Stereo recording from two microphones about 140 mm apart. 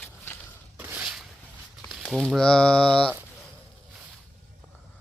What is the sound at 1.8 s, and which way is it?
Speech, centre (ahead or behind).